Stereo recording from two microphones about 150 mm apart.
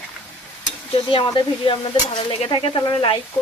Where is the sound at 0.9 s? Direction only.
35° left (ahead or behind).